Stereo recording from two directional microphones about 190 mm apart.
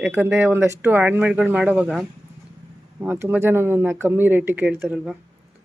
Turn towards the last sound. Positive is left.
turn(degrees=-5)  # may be behind; listen again after turning